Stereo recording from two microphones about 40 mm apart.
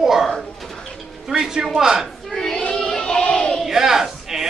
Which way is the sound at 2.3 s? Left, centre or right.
Centre.